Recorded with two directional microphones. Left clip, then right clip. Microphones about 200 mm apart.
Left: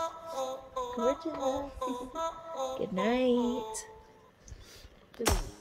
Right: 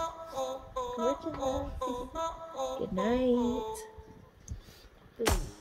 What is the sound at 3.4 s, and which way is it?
Music, centre (ahead or behind).